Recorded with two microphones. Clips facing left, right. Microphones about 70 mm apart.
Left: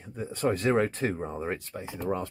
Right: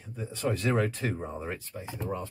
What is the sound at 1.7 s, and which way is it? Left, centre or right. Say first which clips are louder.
Speech: left 4 dB; left.